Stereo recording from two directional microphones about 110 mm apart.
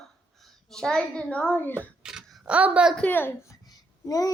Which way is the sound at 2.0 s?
5° right (ahead or behind).